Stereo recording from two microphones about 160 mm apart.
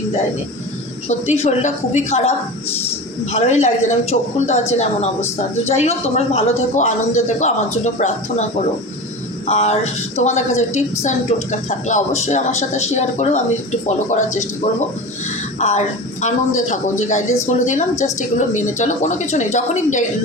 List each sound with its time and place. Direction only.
1.0 s a man's voice: 45° left (ahead or behind)
3.3 s a man's voice: 45° left (ahead or behind)
5.6 s a man's voice: 40° left (ahead or behind)
9.5 s a man's voice: 45° left (ahead or behind)